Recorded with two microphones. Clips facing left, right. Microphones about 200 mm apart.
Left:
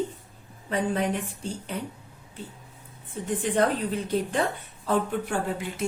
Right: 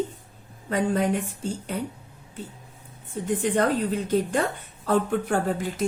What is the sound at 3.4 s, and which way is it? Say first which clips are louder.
A woman's voice: right 1 dB; 40° right (ahead or behind).